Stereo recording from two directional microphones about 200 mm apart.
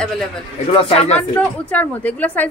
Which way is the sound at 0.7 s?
30° left (ahead or behind).